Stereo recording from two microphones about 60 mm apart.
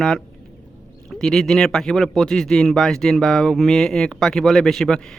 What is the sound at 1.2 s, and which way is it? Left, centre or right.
Speech, centre.